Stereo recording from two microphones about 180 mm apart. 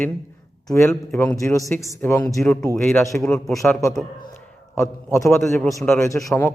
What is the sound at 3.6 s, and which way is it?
Speech, 15° left (ahead or behind).